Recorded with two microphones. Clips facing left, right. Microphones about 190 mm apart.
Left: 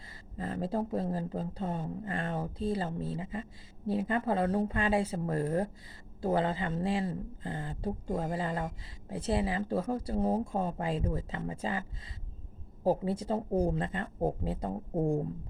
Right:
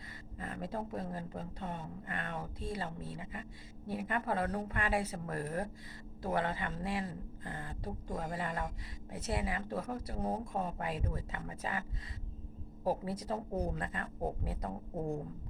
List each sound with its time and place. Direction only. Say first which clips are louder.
0.3 s speech: left 7 dB; 30° left (ahead or behind)